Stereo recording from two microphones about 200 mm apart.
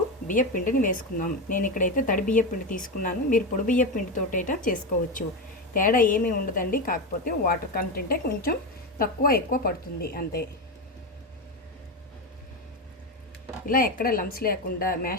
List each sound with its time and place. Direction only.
0.3 s speech: 40° left (ahead or behind)
5.7 s a woman's voice: 45° left (ahead or behind)
13.7 s a woman's voice: 45° left (ahead or behind)